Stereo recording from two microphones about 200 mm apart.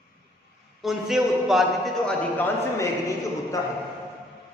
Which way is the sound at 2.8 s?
15° left (ahead or behind).